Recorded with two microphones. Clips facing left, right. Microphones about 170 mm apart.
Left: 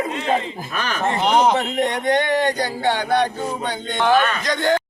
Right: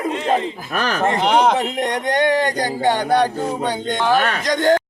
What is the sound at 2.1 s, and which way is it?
Speech, 45° right (ahead or behind).